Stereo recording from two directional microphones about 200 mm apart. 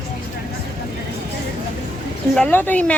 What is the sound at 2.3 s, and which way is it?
Speech, 5° left (ahead or behind).